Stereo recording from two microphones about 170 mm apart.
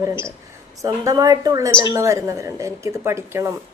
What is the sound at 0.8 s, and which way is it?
Speech, 20° right (ahead or behind).